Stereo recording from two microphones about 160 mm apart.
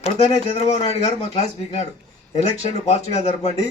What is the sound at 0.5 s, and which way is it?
A man's voice, 40° left (ahead or behind).